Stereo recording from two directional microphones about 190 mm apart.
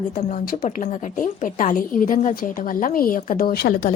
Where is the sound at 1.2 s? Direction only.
45° left (ahead or behind).